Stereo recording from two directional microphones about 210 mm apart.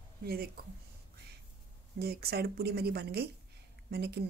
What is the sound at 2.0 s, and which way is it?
Speech, 50° right (ahead or behind).